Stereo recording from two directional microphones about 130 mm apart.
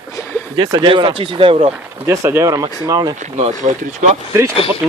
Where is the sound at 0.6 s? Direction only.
35° right (ahead or behind).